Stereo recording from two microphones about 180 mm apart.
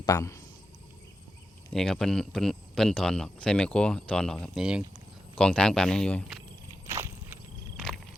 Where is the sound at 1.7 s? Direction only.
5° left (ahead or behind).